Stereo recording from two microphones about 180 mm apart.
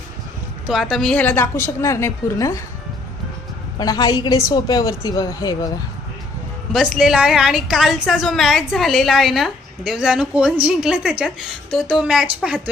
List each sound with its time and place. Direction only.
0.7 s a woman's voice: centre (ahead or behind); by 2.6 s 15° left (ahead or behind)
3.8 s speech: 20° left (ahead or behind)
6.7 s a woman's voice: centre (ahead or behind)